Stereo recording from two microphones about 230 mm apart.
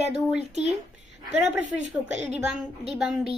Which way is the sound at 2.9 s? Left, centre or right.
Centre.